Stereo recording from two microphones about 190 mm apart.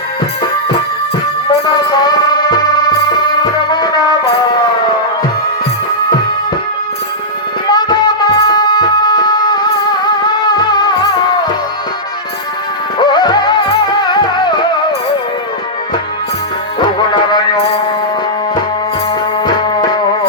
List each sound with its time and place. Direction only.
1.5 s music: 20° left (ahead or behind)
7.7 s music: 20° left (ahead or behind)
13.0 s music: 20° left (ahead or behind)
16.8 s music: 25° left (ahead or behind)
19.5 s music: 25° left (ahead or behind)